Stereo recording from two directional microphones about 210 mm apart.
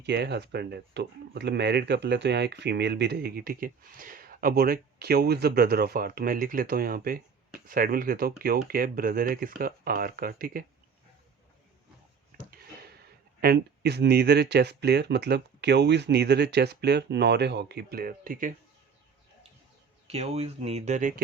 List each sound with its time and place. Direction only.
0.0 s speech: 50° right (ahead or behind)
12.3 s a sound: 45° right (ahead or behind)
13.4 s speech: 50° right (ahead or behind)
20.1 s speech: 30° right (ahead or behind)